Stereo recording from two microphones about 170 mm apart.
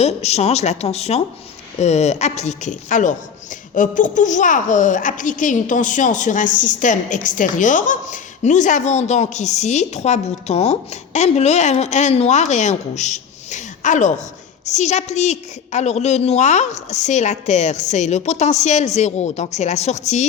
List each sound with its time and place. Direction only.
0.0 s a woman's voice: 40° left (ahead or behind)